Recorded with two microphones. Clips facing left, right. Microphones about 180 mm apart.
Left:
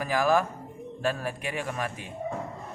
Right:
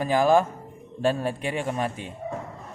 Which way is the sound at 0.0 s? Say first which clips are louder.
Right 4 dB; 25° right (ahead or behind).